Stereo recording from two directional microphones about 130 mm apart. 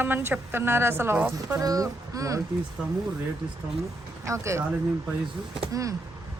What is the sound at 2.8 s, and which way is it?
Speech, 10° right (ahead or behind).